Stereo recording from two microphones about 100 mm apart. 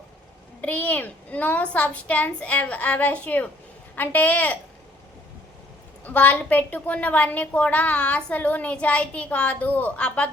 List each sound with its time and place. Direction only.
0.6 s a woman's voice: 15° left (ahead or behind)
6.1 s a woman's voice: 15° left (ahead or behind)